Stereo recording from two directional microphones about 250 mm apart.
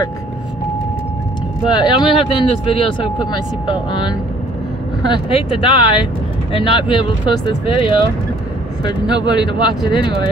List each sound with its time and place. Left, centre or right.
1.7 s speech: centre